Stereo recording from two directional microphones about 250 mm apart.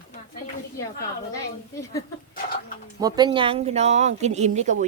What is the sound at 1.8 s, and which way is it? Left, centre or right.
Speech, centre.